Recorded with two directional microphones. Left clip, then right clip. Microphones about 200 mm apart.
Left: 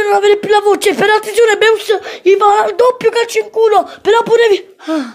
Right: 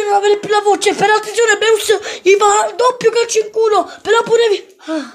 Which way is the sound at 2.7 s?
30° left (ahead or behind).